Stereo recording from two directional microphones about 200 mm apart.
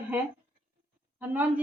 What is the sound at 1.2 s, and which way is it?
Speech, 10° right (ahead or behind).